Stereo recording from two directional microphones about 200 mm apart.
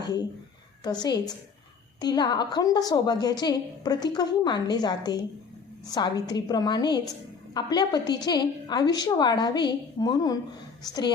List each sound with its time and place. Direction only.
0.9 s a woman's voice: 20° left (ahead or behind)